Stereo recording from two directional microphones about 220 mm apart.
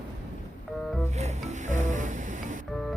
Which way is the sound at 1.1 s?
30° right (ahead or behind).